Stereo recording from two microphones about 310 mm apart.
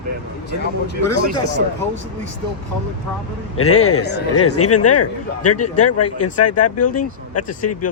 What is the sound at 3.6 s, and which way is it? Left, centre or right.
Speech, left.